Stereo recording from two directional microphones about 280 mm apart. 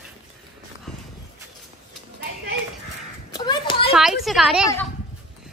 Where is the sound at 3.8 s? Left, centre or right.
Centre.